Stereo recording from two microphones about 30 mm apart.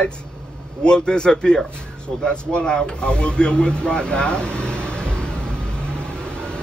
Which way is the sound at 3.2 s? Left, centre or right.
Left.